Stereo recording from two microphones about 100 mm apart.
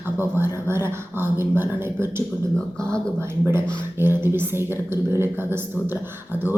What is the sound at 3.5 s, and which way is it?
A man's voice, 25° right (ahead or behind).